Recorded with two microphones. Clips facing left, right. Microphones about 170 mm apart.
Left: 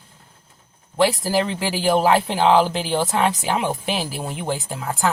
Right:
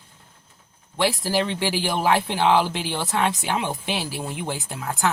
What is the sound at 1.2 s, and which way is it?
Speech, 35° left (ahead or behind).